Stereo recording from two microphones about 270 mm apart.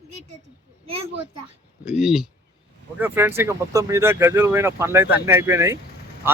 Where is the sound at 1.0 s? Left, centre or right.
Right.